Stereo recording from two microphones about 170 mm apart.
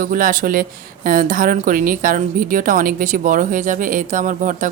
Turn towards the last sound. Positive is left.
turn(degrees=-50)  # may be behind; listen again after turning